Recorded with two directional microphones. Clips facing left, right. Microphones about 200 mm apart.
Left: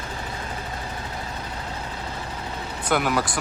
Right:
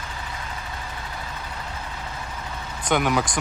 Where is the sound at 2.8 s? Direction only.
5° left (ahead or behind).